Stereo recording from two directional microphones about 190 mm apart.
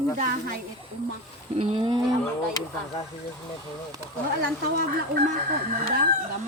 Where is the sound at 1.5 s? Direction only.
30° right (ahead or behind).